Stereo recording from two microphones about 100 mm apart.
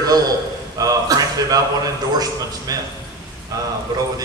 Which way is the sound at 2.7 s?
35° right (ahead or behind).